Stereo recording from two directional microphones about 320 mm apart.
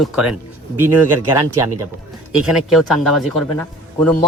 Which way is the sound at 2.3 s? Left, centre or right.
Centre.